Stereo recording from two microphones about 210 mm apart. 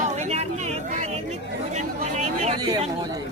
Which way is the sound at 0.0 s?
30° right (ahead or behind).